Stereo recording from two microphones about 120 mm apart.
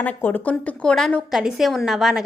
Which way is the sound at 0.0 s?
15° left (ahead or behind).